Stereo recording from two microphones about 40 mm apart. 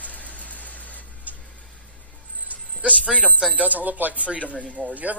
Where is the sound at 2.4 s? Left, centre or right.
Right.